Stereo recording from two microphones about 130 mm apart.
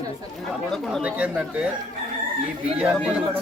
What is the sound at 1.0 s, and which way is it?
Speech, 10° right (ahead or behind).